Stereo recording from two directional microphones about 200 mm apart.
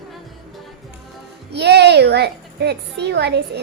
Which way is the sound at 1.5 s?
55° right (ahead or behind).